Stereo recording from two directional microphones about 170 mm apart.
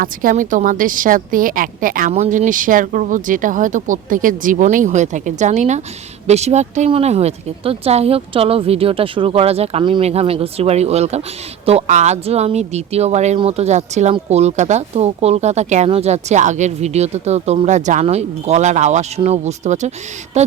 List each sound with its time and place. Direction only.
0.0 s speech: 55° right (ahead or behind)
2.1 s speech: 45° right (ahead or behind)